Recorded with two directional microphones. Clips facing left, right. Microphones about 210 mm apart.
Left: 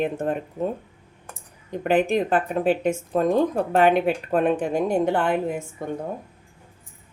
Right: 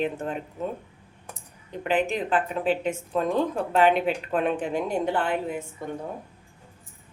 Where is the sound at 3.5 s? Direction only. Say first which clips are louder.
Left 3 dB; 55° left (ahead or behind).